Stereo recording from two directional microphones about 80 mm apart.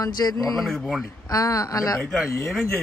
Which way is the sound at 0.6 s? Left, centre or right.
Centre.